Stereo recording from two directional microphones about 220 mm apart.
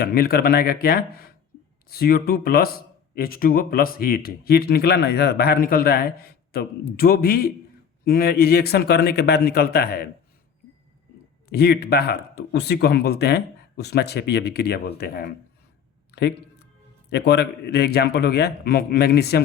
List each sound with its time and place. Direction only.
0.0 s speech: 45° left (ahead or behind)
11.5 s speech: 45° left (ahead or behind)
17.1 s speech: 50° left (ahead or behind)